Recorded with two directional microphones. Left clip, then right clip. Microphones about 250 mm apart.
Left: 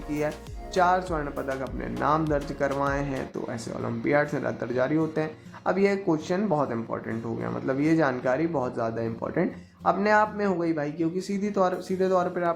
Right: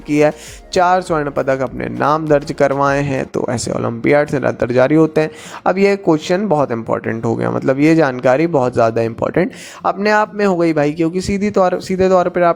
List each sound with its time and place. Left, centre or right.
0.1 s speech: right